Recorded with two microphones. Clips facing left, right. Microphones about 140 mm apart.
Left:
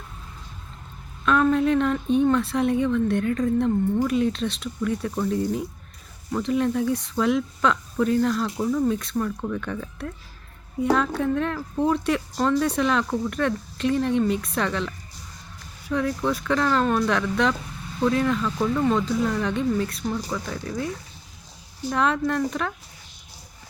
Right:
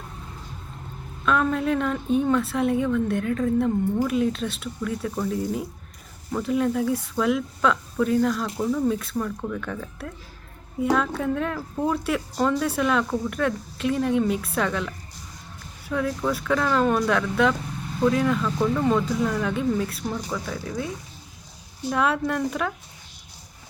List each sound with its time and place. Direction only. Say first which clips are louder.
1.2 s speech: left 3 dB; centre (ahead or behind)
21.8 s speech: even; 5° right (ahead or behind)